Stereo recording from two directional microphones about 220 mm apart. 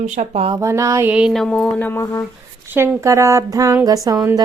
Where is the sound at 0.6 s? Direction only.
15° right (ahead or behind); by 2.3 s 15° left (ahead or behind).